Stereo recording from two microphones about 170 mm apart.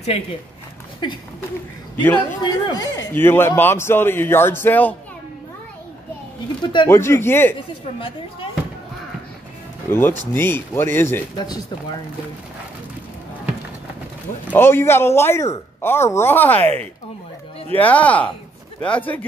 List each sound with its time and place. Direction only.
2.1 s a man's voice: 25° left (ahead or behind)
6.6 s speech: 30° left (ahead or behind)
6.9 s a man's voice: 15° left (ahead or behind)
9.8 s a man's voice: 10° left (ahead or behind)
11.3 s speech: 25° left (ahead or behind)
14.5 s a man's voice: 15° left (ahead or behind)
17.7 s a man's voice: 10° left (ahead or behind)